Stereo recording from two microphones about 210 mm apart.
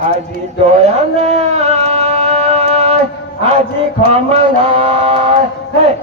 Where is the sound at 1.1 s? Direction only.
30° right (ahead or behind).